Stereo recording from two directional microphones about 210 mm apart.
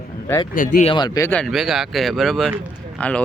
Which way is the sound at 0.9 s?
20° left (ahead or behind).